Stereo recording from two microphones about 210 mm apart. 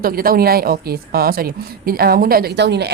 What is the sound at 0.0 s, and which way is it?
Speech, 45° right (ahead or behind).